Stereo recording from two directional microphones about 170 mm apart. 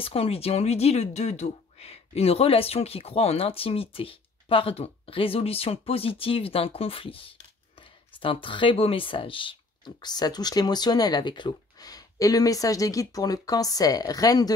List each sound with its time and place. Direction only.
0.0 s speech: 35° left (ahead or behind)